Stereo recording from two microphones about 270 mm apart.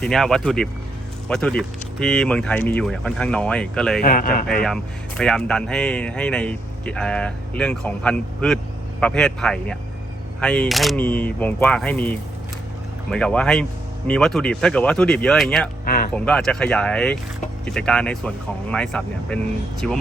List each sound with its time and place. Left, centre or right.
0.0 s speech: centre
4.0 s speech: left
4.6 s speech: centre
15.8 s a sound: left
16.1 s speech: centre